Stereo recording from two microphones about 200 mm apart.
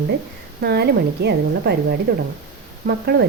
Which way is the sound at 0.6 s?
55° right (ahead or behind).